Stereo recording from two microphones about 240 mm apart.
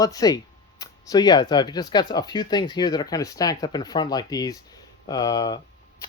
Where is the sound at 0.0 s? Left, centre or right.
Centre.